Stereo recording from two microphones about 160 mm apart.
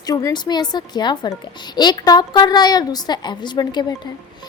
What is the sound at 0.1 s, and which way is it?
A woman's voice, 20° left (ahead or behind).